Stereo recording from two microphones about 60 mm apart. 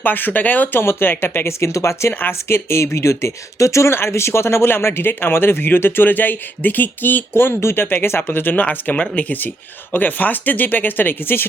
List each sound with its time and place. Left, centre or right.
0.0 s speech: left
1.6 s speech: left